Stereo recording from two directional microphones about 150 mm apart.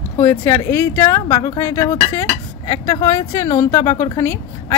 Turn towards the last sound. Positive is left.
turn(degrees=20)  # may be behind; listen again after turning